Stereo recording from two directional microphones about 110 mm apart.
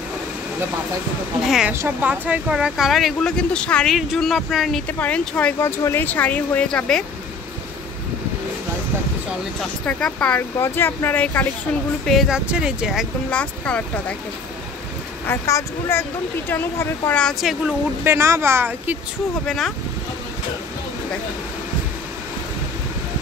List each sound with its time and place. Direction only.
1.7 s speech: 15° right (ahead or behind); by 4.8 s centre (ahead or behind)
4.8 s speech: 15° left (ahead or behind)
9.8 s speech: 5° left (ahead or behind)
10.6 s speech: 20° left (ahead or behind)
12.1 s speech: centre (ahead or behind)
13.3 s speech: 10° left (ahead or behind)
15.2 s speech: 25° left (ahead or behind)
17.1 s speech: 5° left (ahead or behind)
18.0 s a woman's voice: 25° right (ahead or behind)
19.4 s speech: 5° left (ahead or behind)